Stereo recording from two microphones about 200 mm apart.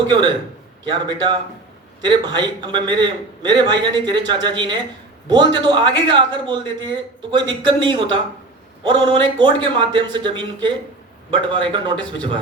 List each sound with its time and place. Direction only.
0.1 s a man's voice: 20° right (ahead or behind)